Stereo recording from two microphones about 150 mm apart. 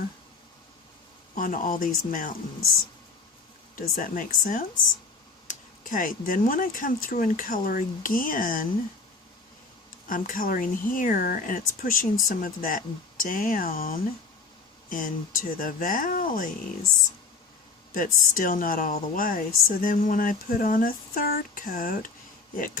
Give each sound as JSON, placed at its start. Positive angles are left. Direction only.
{"t": 1.4, "sound": "a woman's voice", "side_deg": 65}
{"t": 3.8, "sound": "a woman's voice", "side_deg": 65}
{"t": 10.1, "sound": "a woman's voice", "side_deg": 65}
{"t": 17.9, "sound": "a woman's voice", "side_deg": 65}